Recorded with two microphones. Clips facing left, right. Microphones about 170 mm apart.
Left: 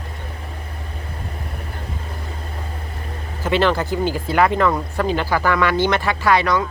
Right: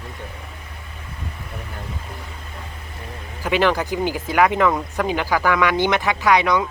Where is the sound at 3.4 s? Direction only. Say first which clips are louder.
Left 1 dB; 15° right (ahead or behind).